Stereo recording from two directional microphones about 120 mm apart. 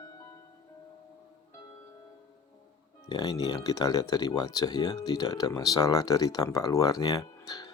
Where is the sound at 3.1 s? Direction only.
35° left (ahead or behind).